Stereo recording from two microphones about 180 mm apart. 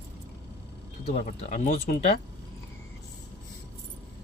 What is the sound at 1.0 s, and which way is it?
Speech, 45° left (ahead or behind).